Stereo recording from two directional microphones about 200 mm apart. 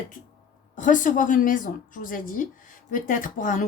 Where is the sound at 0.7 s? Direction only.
40° left (ahead or behind).